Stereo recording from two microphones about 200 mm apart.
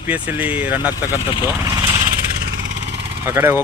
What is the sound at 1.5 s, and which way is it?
Speech, 15° right (ahead or behind).